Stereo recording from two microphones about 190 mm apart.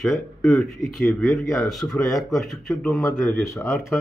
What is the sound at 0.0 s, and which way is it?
Speech, centre (ahead or behind).